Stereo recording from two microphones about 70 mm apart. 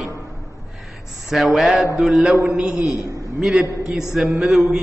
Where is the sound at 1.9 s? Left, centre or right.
Centre.